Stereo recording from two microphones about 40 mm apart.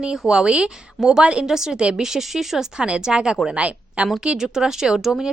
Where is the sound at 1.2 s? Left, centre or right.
Right.